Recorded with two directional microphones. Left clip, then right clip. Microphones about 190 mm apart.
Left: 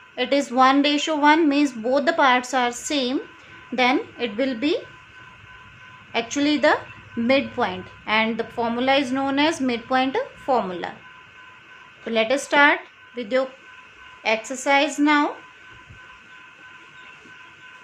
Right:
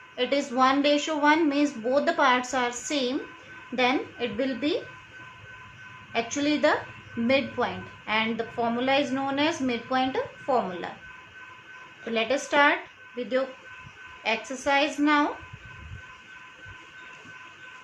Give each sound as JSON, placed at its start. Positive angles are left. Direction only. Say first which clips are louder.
{"t": 0.2, "sound": "a woman's voice", "louder": "left 5 dB", "side_deg": 45}
{"t": 6.1, "sound": "a woman's voice", "louder": "left 4 dB", "side_deg": 45}
{"t": 12.0, "sound": "a woman's voice", "louder": "left 5 dB", "side_deg": 45}